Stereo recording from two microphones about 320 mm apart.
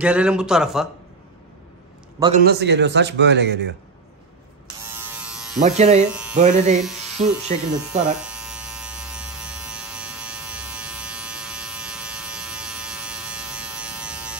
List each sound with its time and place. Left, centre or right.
0.0 s a man's voice: centre
2.1 s a man's voice: centre
2.4 s a man's voice: right
4.8 s electric shaver: centre
5.6 s speech: right
6.0 s speech: centre
6.3 s speech: right
8.0 s electric shaver: centre